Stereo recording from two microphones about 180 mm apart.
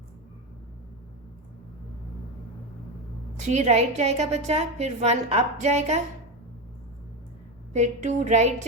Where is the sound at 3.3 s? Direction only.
40° right (ahead or behind).